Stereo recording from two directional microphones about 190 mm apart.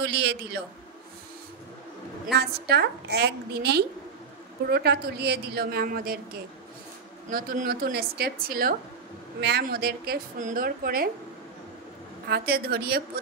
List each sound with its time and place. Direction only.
0.0 s a man's voice: 65° right (ahead or behind)
2.3 s a woman's voice: 60° right (ahead or behind)
7.2 s a woman's voice: 50° right (ahead or behind)
12.3 s a woman's voice: 55° right (ahead or behind)